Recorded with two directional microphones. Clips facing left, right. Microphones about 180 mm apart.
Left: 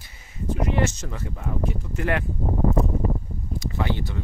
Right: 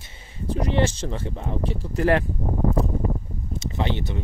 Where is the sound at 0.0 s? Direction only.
30° right (ahead or behind).